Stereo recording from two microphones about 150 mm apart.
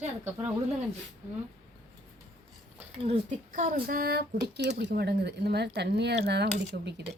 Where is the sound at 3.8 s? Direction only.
90° right.